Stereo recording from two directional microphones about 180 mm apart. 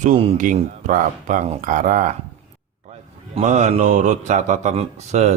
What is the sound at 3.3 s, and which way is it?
A man's voice, 40° right (ahead or behind).